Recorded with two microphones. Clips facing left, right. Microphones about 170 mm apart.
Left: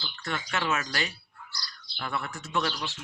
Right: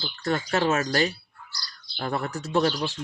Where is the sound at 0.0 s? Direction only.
35° right (ahead or behind).